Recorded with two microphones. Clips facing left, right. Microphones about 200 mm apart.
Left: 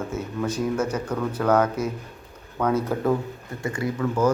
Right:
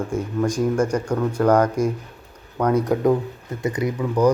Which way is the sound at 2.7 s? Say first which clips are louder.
Right 7 dB; 15° right (ahead or behind).